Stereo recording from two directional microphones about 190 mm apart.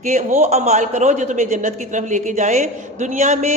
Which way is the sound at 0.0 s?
40° right (ahead or behind).